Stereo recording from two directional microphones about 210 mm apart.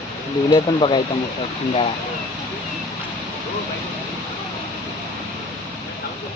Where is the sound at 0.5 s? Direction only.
20° left (ahead or behind).